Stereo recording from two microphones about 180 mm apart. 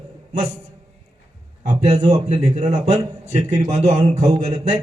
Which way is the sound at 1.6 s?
40° right (ahead or behind).